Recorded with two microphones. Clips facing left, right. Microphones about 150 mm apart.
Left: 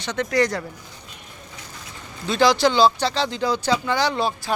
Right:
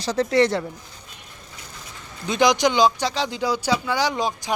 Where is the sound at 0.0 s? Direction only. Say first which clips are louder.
Right 3 dB; 35° right (ahead or behind).